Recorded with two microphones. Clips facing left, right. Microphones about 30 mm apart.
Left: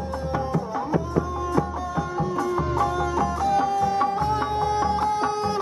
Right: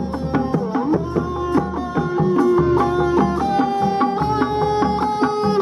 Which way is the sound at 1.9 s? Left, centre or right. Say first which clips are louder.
Right 9 dB; right.